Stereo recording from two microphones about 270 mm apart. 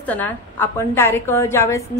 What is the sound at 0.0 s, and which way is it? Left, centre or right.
A woman's voice, centre.